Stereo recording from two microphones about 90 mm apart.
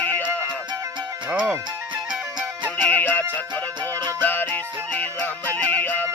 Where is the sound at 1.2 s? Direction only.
15° right (ahead or behind).